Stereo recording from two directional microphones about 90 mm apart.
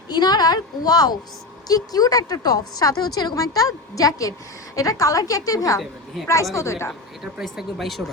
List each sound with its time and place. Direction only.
0.1 s a woman's voice: 50° left (ahead or behind); by 6.9 s 30° left (ahead or behind)
7.2 s speech: 5° right (ahead or behind)